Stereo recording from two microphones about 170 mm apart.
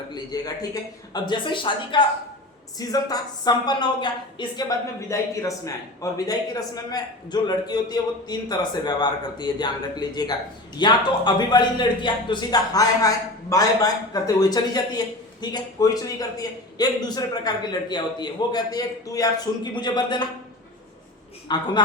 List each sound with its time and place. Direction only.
0.1 s speech: 20° left (ahead or behind)
21.4 s a woman's voice: 25° left (ahead or behind)